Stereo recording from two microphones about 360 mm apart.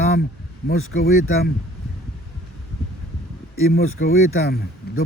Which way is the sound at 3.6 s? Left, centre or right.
Left.